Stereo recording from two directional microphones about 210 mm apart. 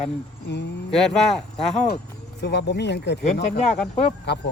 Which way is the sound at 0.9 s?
Centre (ahead or behind).